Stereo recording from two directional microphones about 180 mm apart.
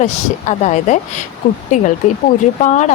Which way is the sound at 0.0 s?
40° left (ahead or behind).